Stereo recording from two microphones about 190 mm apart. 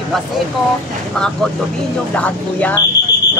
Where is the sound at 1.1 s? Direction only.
5° left (ahead or behind).